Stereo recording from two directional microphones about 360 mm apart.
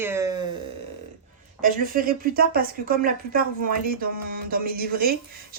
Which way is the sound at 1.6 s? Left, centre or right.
Right.